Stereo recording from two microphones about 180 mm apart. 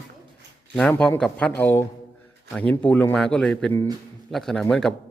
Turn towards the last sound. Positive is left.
turn(degrees=5)  # may be behind; listen again after turning